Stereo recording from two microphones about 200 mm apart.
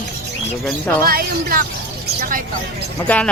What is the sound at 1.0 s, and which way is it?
Speech, 50° right (ahead or behind).